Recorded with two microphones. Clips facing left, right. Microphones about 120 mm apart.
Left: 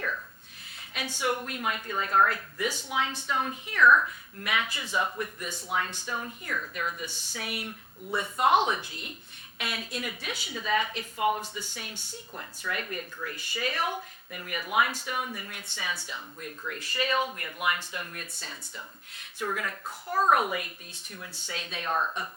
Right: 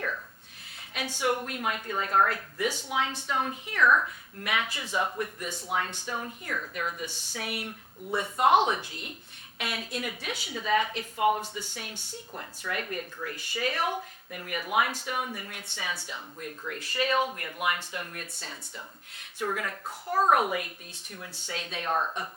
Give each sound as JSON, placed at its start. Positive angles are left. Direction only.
{"t": 0.9, "sound": "a woman's voice", "side_deg": -55}
{"t": 4.4, "sound": "speech", "side_deg": -50}
{"t": 5.0, "sound": "speech", "side_deg": -35}
{"t": 5.4, "sound": "speech", "side_deg": -65}
{"t": 6.1, "sound": "speech", "side_deg": -40}
{"t": 7.3, "sound": "speech", "side_deg": -55}
{"t": 12.4, "sound": "speech", "side_deg": -40}
{"t": 15.6, "sound": "speech", "side_deg": -65}
{"t": 16.1, "sound": "speech", "side_deg": -40}
{"t": 19.4, "sound": "speech", "side_deg": -45}
{"t": 20.3, "sound": "speech", "side_deg": -50}
{"t": 21.9, "sound": "speech", "side_deg": -35}